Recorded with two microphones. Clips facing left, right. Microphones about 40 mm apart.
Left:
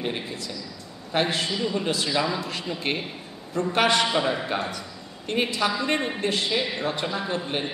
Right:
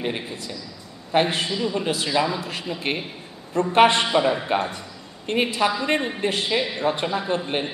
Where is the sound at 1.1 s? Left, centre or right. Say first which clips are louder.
Right 3 dB; right.